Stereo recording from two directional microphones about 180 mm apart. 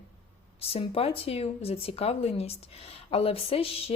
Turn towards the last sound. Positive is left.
turn(degrees=30)  # may be behind; listen again after turning